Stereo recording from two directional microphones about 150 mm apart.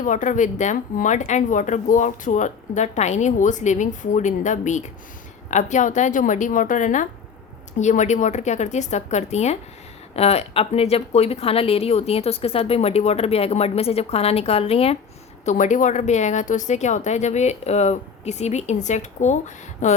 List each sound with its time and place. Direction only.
0.0 s a woman's voice: 60° left (ahead or behind); by 14.9 s 40° left (ahead or behind)
15.4 s a woman's voice: 55° left (ahead or behind)